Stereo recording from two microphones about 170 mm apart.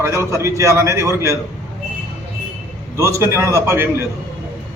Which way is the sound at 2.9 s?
15° right (ahead or behind).